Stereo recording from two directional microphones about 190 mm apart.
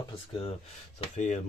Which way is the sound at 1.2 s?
40° left (ahead or behind).